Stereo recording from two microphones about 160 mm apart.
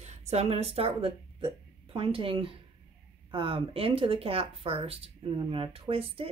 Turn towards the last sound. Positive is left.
turn(degrees=-35)  # may be behind; listen again after turning